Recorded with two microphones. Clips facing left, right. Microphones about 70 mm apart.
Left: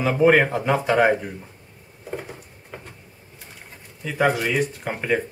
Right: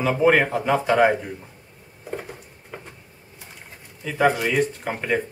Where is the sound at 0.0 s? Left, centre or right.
Centre.